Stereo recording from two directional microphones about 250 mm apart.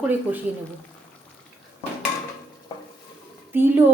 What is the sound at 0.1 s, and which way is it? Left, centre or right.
Speech, centre.